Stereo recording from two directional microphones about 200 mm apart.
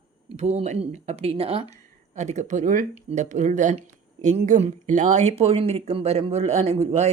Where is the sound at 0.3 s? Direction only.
35° right (ahead or behind).